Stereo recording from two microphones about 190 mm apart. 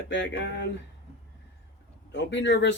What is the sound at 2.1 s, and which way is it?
Speech, 65° left (ahead or behind).